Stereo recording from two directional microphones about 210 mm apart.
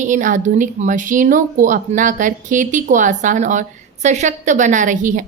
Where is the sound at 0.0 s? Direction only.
35° right (ahead or behind).